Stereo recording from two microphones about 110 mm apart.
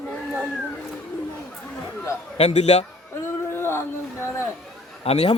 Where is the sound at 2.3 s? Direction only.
75° left (ahead or behind).